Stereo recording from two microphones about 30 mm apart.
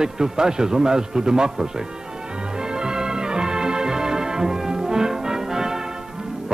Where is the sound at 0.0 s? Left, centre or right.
Right.